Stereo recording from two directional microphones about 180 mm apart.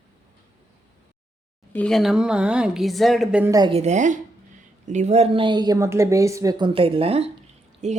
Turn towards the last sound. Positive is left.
turn(degrees=-40)  # may be behind; listen again after turning